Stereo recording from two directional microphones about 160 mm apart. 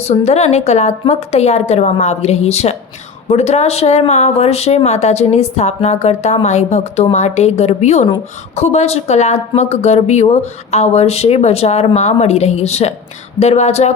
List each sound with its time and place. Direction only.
0.0 s speech: 45° left (ahead or behind)